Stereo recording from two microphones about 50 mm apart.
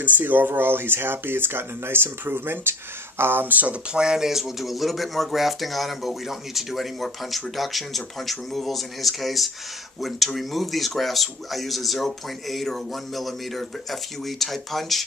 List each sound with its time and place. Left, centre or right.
0.0 s speech: right
3.9 s speech: centre